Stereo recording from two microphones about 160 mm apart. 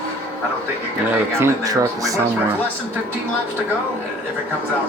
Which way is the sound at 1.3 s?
20° right (ahead or behind).